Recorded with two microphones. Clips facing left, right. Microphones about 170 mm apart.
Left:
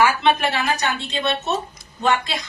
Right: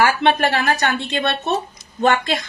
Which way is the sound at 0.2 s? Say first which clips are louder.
Right 2 dB; 55° right (ahead or behind).